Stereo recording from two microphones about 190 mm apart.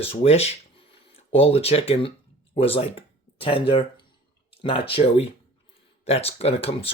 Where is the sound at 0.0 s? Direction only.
30° left (ahead or behind).